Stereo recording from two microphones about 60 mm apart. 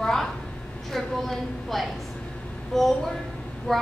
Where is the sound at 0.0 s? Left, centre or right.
Centre.